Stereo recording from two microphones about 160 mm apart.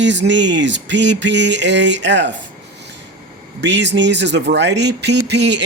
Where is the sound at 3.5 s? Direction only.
90° right.